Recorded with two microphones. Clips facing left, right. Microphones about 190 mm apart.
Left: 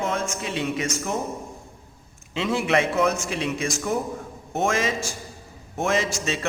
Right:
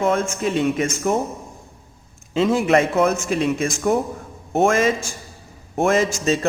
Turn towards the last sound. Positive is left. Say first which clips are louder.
# right 6 dB
turn(degrees=-50)  # may be behind; listen again after turning